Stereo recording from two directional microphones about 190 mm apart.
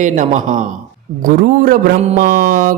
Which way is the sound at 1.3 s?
45° right (ahead or behind).